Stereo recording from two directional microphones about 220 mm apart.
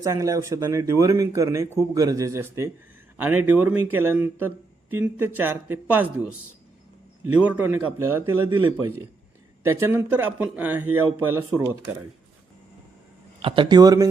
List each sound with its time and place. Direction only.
0.0 s a man's voice: 15° right (ahead or behind)
7.4 s speech: 5° right (ahead or behind)
13.4 s speech: 20° right (ahead or behind)